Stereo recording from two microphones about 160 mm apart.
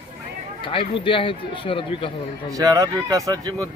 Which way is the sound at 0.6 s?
30° left (ahead or behind).